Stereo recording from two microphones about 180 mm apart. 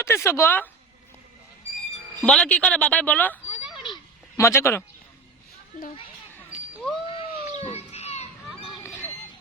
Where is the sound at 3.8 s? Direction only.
20° left (ahead or behind).